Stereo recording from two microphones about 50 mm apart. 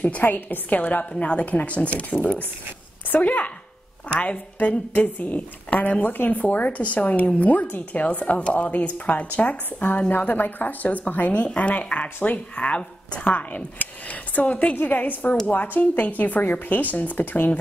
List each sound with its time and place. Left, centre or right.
0.0 s speech: left
2.1 s a woman's voice: left
14.8 s speech: left